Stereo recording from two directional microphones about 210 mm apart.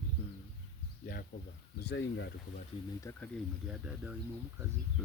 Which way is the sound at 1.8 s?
55° left (ahead or behind).